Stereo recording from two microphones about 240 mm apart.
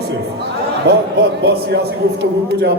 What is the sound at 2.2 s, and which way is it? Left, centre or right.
Speech, right.